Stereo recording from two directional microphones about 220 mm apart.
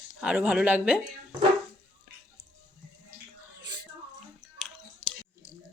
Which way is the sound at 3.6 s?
20° right (ahead or behind).